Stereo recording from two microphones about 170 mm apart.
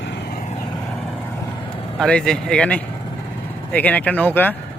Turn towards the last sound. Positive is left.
turn(degrees=10)  # may be behind; listen again after turning